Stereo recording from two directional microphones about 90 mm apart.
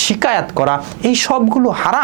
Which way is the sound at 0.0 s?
15° right (ahead or behind).